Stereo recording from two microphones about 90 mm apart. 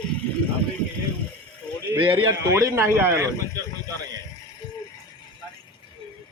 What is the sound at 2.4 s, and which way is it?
Speech, 40° right (ahead or behind).